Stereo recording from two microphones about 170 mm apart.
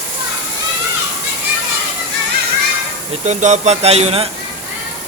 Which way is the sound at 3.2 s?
40° right (ahead or behind).